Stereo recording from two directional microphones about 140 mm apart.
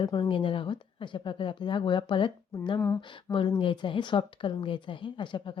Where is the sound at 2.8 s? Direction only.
15° left (ahead or behind).